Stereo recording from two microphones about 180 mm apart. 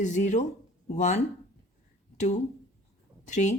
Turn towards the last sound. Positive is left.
turn(degrees=40)  # may be behind; listen again after turning